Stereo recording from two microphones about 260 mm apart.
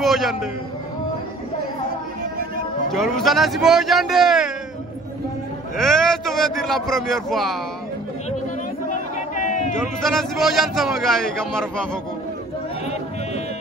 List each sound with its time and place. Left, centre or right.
0.0 s a man's voice: centre
2.9 s a man's voice: centre
5.8 s a man's voice: centre
8.9 s a sound: left
10.0 s a man's voice: centre